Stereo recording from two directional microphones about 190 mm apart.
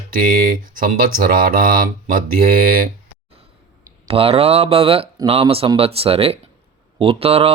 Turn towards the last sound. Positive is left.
turn(degrees=-30)  # may be behind; listen again after turning